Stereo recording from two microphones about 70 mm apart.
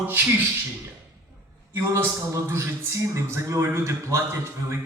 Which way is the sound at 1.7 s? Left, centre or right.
Right.